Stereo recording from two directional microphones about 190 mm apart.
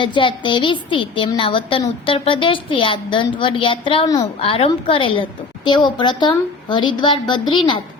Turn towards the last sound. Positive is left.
turn(degrees=25)  # may be behind; listen again after turning